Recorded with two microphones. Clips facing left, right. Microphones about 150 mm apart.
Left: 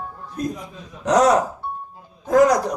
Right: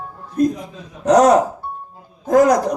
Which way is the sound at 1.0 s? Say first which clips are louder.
Right 4 dB; 45° right (ahead or behind).